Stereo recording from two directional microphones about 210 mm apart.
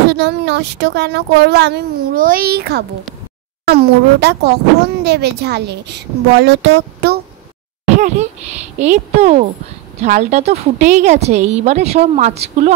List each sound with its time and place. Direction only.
0.1 s speech: 55° right (ahead or behind)
7.8 s a woman's voice: 35° right (ahead or behind)